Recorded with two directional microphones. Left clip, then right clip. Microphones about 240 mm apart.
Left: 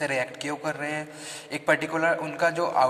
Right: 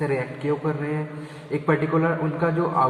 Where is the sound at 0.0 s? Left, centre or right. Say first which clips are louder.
Right 2 dB; left.